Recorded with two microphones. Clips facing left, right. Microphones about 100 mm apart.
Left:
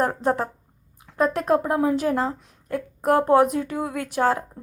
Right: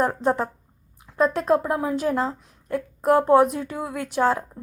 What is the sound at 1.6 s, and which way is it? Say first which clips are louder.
Speech: left 2 dB; 45° left (ahead or behind).